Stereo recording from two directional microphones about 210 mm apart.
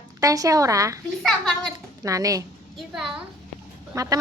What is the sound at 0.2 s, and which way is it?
Speech, 15° right (ahead or behind).